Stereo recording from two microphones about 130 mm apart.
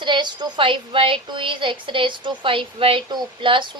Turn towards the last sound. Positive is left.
turn(degrees=-40)  # may be behind; listen again after turning